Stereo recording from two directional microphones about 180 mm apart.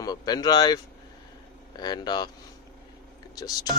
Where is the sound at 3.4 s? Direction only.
20° left (ahead or behind).